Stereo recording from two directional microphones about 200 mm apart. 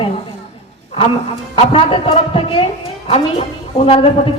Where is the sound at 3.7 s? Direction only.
30° left (ahead or behind).